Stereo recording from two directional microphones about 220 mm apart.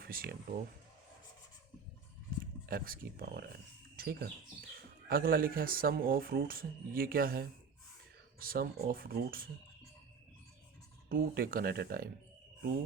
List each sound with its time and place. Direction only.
0.0 s speech: 40° right (ahead or behind)
2.4 s speech: 40° right (ahead or behind)
3.9 s bird: 45° right (ahead or behind)
5.0 s speech: 40° right (ahead or behind)
11.1 s speech: 40° right (ahead or behind)